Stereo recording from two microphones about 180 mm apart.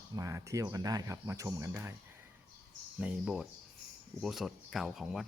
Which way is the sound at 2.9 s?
5° right (ahead or behind).